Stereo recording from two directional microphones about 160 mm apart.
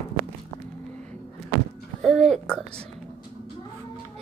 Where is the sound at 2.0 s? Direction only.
Centre (ahead or behind).